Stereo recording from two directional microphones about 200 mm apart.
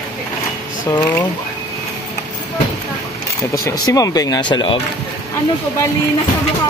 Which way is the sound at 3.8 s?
20° left (ahead or behind).